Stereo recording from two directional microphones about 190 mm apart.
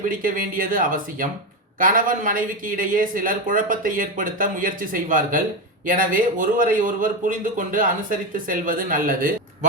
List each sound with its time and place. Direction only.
0.1 s speech: 45° right (ahead or behind)